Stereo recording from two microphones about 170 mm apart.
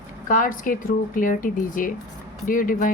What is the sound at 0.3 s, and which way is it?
Speech, 50° left (ahead or behind).